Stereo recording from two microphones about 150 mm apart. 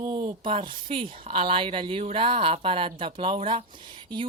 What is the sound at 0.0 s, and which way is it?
A woman's voice, 35° right (ahead or behind).